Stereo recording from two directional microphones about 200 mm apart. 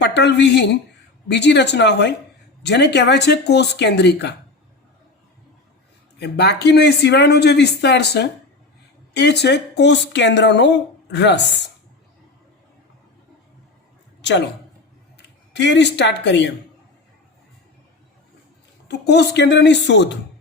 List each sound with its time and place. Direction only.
0.0 s a woman's voice: 60° left (ahead or behind)
6.1 s speech: 55° left (ahead or behind)
14.2 s a sound: 60° left (ahead or behind)
15.5 s speech: 60° left (ahead or behind)
18.9 s speech: 60° left (ahead or behind)